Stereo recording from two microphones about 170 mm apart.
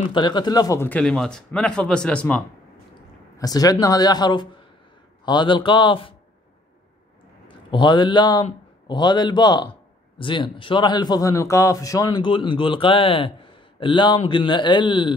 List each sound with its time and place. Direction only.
0.1 s speech: 25° left (ahead or behind); by 2.4 s 5° left (ahead or behind)
3.3 s a man's voice: 20° left (ahead or behind)
7.4 s a man's voice: 25° left (ahead or behind)